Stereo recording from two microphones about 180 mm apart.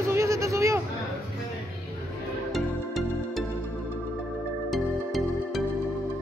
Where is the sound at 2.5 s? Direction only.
Centre (ahead or behind).